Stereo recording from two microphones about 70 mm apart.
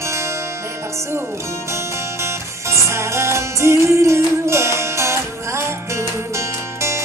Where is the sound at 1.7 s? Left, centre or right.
Right.